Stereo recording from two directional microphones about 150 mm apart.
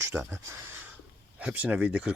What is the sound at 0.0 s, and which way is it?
Speech, 15° right (ahead or behind).